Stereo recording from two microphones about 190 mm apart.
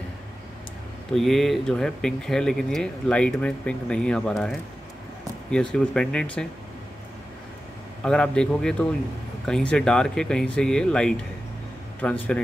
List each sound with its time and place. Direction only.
1.1 s speech: centre (ahead or behind)
8.0 s speech: 5° left (ahead or behind)